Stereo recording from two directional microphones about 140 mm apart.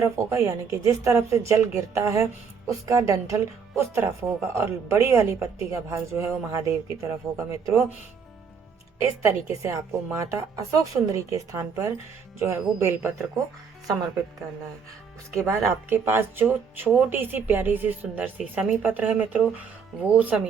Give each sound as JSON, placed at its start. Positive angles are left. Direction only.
{"t": 0.0, "sound": "speech", "side_deg": -20}
{"t": 9.6, "sound": "speech", "side_deg": -20}
{"t": 15.4, "sound": "speech", "side_deg": -15}